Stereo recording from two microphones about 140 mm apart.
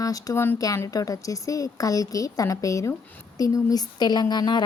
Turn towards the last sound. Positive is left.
turn(degrees=30)  # may be behind; listen again after turning